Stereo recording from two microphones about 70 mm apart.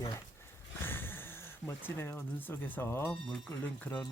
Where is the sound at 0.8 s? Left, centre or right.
Left.